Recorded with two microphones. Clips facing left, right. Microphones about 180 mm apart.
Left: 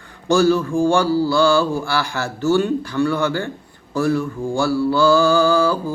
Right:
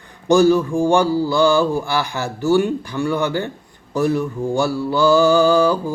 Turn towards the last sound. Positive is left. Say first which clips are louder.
# right 2 dB
turn(degrees=-20)  # may be behind; listen again after turning